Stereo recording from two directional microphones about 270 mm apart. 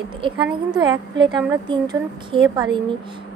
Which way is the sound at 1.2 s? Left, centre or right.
Centre.